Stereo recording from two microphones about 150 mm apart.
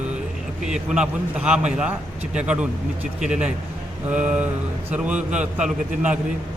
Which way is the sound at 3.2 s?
5° right (ahead or behind).